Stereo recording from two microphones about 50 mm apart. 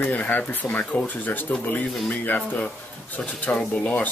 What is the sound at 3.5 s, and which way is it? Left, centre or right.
Speech, left.